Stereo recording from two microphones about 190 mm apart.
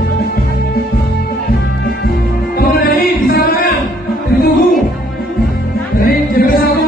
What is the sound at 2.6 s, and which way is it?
Music, 50° left (ahead or behind).